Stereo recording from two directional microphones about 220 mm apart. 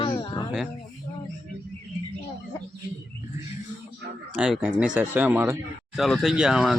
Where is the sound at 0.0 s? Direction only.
20° left (ahead or behind).